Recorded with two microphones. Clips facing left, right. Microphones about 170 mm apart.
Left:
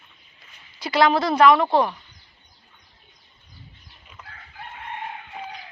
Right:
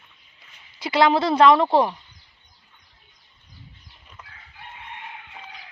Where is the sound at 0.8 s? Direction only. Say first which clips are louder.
Right 1 dB; 25° right (ahead or behind).